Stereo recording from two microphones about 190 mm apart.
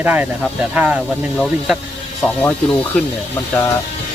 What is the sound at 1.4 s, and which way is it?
Speech, centre (ahead or behind).